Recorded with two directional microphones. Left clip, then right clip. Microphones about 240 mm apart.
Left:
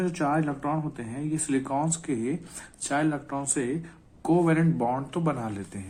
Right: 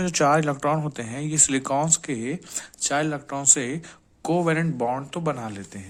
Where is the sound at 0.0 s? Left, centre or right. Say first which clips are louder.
Right 6 dB; right.